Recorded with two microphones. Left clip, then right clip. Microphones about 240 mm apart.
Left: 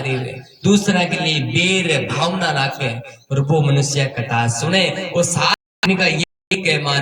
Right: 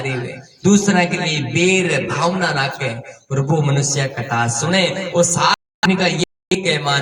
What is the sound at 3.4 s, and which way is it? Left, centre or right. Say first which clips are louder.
A man's voice: left 1 dB; left.